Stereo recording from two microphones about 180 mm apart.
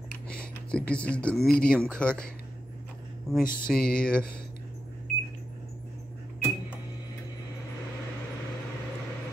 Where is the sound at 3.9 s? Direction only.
5° left (ahead or behind).